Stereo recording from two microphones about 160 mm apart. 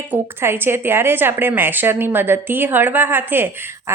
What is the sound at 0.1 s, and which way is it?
A woman's voice, 15° right (ahead or behind).